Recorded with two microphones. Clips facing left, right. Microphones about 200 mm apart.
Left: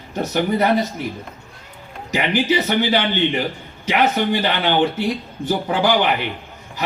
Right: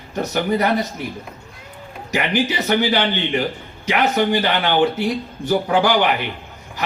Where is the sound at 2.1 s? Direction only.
55° right (ahead or behind).